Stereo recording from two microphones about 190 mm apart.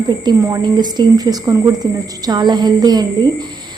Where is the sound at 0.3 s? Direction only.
20° right (ahead or behind).